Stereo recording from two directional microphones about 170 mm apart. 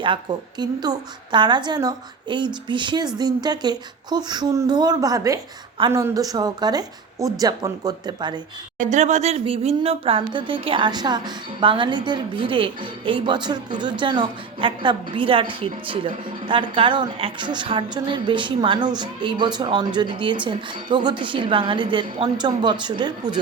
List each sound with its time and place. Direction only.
0.0 s speech: 25° right (ahead or behind)
8.8 s speech: 45° right (ahead or behind); by 23.4 s 25° right (ahead or behind)